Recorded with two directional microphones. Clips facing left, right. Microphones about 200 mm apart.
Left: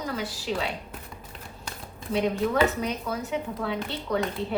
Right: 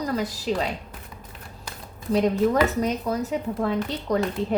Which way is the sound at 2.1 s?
40° right (ahead or behind).